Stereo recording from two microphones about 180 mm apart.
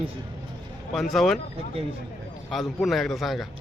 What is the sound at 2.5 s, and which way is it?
Speech, centre (ahead or behind).